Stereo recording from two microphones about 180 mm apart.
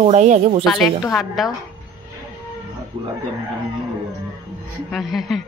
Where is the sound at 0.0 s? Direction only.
40° right (ahead or behind).